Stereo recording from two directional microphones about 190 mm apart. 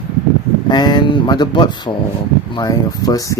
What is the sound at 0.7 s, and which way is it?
Speech, 20° left (ahead or behind).